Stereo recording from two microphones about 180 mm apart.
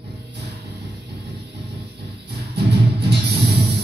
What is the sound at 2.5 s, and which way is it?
Music, 60° right (ahead or behind).